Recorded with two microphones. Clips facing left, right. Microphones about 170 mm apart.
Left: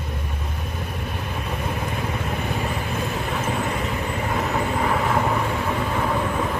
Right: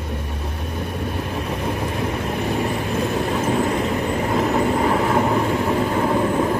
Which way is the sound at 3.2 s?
35° right (ahead or behind).